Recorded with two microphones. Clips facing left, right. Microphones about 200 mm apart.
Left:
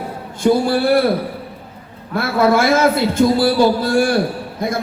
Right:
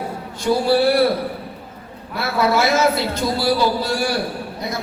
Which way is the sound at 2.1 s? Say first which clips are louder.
Left 4 dB; 50° left (ahead or behind).